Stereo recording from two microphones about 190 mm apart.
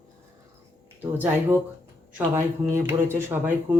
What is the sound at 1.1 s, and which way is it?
Speech, 10° right (ahead or behind).